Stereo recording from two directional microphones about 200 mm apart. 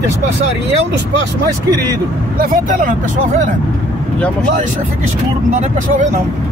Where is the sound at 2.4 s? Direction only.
40° right (ahead or behind).